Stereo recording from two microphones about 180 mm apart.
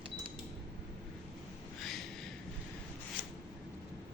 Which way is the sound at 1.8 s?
Centre (ahead or behind).